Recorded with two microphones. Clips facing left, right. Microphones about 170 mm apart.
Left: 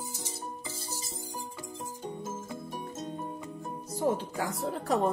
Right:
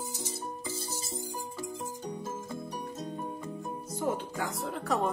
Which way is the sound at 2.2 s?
5° left (ahead or behind).